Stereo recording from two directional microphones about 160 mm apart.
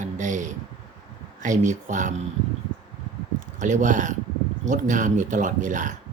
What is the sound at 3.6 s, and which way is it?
Speech, 50° right (ahead or behind).